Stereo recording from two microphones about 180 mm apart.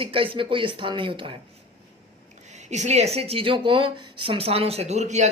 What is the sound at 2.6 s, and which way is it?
A man's voice, 40° right (ahead or behind).